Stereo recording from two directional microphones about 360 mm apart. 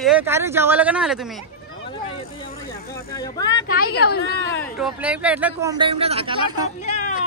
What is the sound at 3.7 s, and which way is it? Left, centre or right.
Speech, left.